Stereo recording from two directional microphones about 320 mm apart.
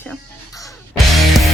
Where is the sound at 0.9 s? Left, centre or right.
Centre.